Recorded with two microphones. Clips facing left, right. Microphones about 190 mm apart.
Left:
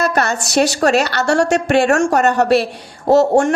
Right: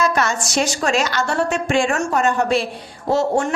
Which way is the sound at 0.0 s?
60° left (ahead or behind).